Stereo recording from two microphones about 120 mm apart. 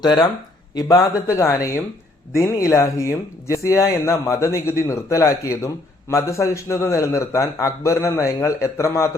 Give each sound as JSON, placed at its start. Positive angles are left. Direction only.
{"t": 0.0, "sound": "speech", "side_deg": 35}